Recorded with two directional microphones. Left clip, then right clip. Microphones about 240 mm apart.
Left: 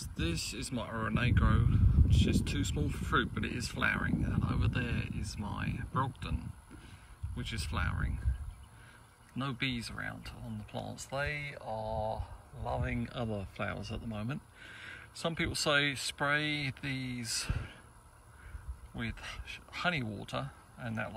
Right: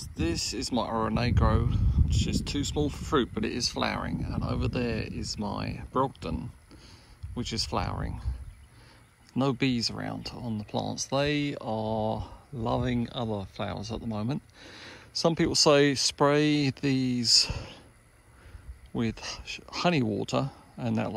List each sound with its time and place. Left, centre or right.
0.2 s speech: centre
9.3 s speech: centre
10.9 s speech: right
11.1 s speech: right
11.9 s speech: right
13.0 s speech: centre
18.9 s speech: centre